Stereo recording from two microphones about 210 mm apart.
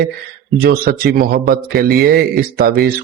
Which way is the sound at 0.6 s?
45° right (ahead or behind).